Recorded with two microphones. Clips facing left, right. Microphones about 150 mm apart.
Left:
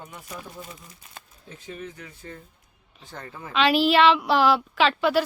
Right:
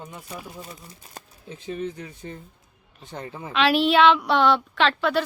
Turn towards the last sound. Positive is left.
turn(degrees=5)  # may be behind; listen again after turning